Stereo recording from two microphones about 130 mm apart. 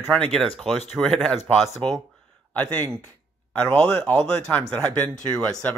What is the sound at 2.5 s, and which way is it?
Speech, 10° left (ahead or behind).